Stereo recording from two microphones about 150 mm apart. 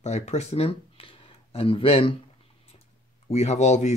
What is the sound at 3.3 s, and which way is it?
Speech, 50° left (ahead or behind).